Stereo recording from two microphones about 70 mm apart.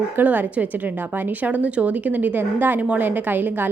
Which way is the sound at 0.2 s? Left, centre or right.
Right.